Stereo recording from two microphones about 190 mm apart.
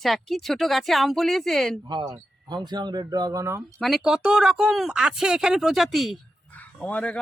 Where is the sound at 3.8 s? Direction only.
Centre (ahead or behind).